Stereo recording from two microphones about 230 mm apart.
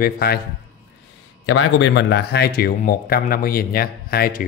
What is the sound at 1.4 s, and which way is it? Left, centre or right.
A man's voice, left.